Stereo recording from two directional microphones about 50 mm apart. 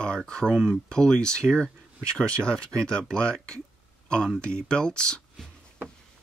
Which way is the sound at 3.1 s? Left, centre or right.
Centre.